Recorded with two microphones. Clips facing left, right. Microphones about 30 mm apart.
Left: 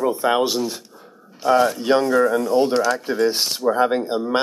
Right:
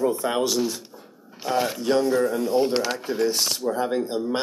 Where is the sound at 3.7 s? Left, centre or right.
Left.